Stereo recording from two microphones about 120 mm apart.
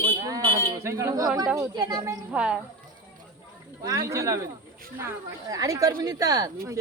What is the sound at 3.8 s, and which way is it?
A woman's voice, 30° right (ahead or behind).